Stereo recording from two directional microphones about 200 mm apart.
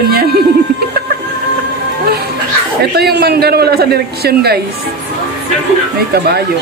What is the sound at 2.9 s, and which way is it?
A man's voice, 55° right (ahead or behind).